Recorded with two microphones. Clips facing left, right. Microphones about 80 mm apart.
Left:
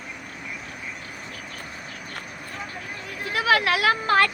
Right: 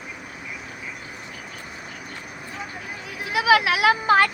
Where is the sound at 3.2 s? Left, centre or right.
Centre.